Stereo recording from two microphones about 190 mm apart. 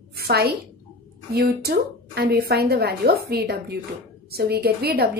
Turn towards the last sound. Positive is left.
turn(degrees=-55)  # may be behind; listen again after turning